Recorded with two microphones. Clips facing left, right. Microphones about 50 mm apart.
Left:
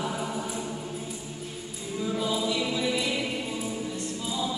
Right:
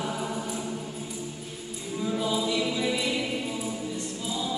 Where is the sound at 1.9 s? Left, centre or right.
Centre.